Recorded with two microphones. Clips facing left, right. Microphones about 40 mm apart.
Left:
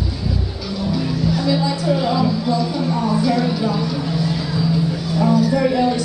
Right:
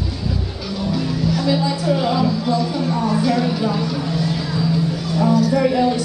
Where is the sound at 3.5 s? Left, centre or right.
Right.